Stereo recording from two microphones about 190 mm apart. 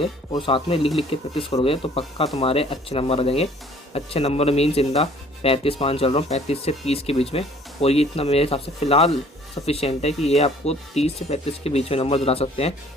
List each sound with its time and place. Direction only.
0.0 s speech: 25° left (ahead or behind)